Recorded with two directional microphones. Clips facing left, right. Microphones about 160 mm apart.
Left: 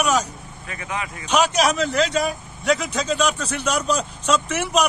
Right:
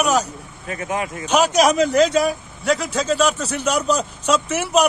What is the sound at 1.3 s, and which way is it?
A man's voice, 10° right (ahead or behind).